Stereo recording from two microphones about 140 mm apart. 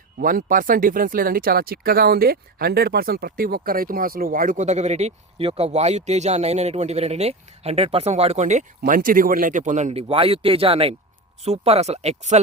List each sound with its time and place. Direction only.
0.2 s speech: 80° right; by 12.4 s 55° right (ahead or behind)